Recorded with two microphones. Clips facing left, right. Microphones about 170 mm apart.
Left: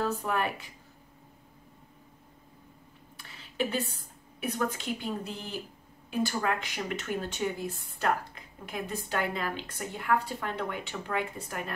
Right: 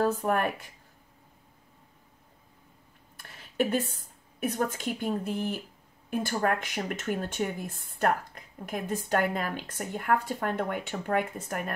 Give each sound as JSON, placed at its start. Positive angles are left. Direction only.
{"t": 0.0, "sound": "speech", "side_deg": -50}
{"t": 3.2, "sound": "a woman's voice", "side_deg": -50}